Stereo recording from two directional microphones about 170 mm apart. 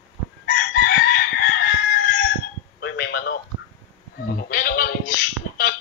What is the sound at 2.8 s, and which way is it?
Telephone, 65° left (ahead or behind).